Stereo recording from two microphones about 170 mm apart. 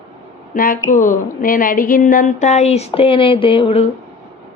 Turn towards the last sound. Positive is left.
turn(degrees=35)  # may be behind; listen again after turning